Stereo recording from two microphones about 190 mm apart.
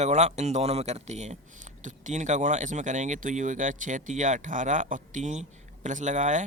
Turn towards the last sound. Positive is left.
turn(degrees=-40)  # may be behind; listen again after turning